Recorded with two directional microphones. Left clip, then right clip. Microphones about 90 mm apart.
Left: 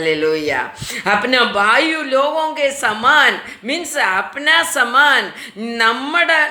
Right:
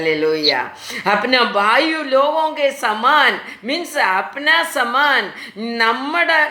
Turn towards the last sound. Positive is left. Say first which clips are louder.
# left 1 dB
turn(degrees=-20)  # may be behind; listen again after turning